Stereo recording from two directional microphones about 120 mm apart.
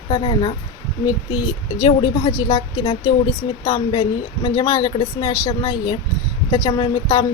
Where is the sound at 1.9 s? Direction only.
40° left (ahead or behind).